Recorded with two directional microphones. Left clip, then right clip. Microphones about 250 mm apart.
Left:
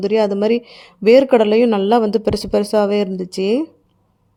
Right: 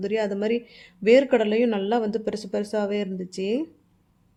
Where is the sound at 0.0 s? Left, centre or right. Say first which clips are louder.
Left 9 dB; left.